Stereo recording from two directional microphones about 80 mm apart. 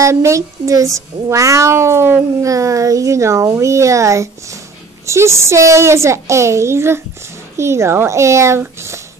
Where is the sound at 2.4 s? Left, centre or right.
Right.